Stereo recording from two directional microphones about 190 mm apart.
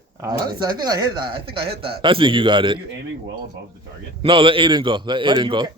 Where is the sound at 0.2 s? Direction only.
20° right (ahead or behind).